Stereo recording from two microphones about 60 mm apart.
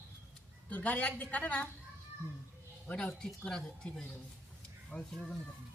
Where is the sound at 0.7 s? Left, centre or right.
Left.